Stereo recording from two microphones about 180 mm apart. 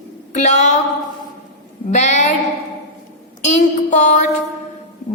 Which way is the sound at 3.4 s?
40° left (ahead or behind).